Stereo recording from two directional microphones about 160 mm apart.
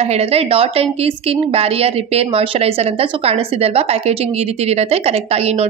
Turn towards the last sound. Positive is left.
turn(degrees=-40)  # may be behind; listen again after turning